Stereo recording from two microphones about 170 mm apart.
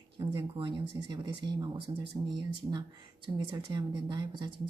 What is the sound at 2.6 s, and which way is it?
Speech, 15° right (ahead or behind).